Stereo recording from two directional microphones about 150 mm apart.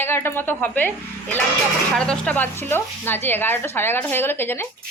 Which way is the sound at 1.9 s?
5° left (ahead or behind).